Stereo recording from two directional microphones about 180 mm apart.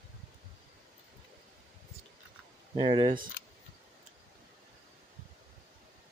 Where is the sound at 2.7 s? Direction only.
25° right (ahead or behind).